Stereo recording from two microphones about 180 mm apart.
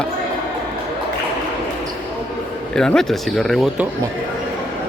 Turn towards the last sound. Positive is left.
turn(degrees=0)  # may be behind; listen again after turning